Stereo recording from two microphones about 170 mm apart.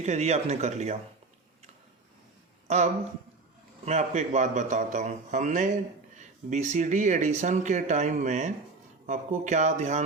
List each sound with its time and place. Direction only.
0.0 s speech: 40° right (ahead or behind)
2.6 s speech: 40° right (ahead or behind)